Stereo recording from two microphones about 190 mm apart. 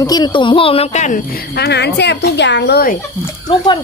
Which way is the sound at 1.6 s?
60° left (ahead or behind).